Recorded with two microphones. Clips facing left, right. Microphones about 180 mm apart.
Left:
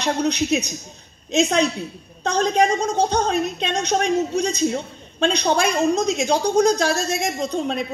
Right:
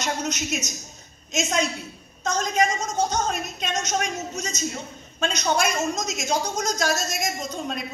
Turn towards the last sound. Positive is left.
turn(degrees=30)  # may be behind; listen again after turning